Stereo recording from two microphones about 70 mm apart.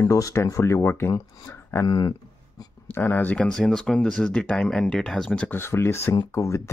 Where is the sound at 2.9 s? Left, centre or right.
Left.